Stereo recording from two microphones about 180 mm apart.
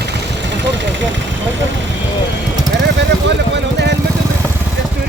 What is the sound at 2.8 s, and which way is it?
Vehicle, 75° right (ahead or behind).